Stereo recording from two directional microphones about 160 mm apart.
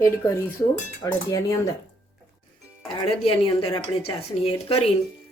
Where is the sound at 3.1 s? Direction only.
35° left (ahead or behind).